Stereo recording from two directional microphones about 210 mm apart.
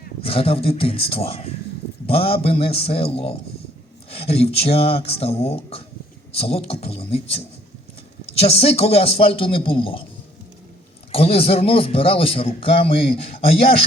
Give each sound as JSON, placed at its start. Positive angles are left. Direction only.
{"t": 0.2, "sound": "a man's voice", "side_deg": 25}
{"t": 8.3, "sound": "a man's voice", "side_deg": 30}
{"t": 11.1, "sound": "a man's voice", "side_deg": 30}